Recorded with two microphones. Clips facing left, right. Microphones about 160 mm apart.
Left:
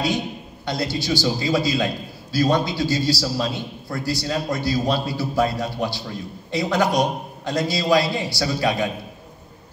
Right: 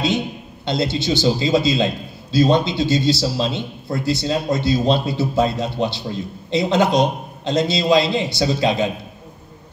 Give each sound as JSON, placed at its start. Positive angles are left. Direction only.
{"t": 0.7, "sound": "a man's voice", "side_deg": -25}